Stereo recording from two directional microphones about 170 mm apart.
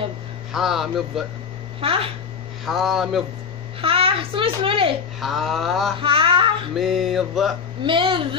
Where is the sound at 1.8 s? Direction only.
35° right (ahead or behind).